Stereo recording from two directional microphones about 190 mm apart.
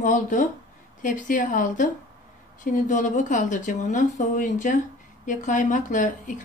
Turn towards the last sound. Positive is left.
turn(degrees=45)  # may be behind; listen again after turning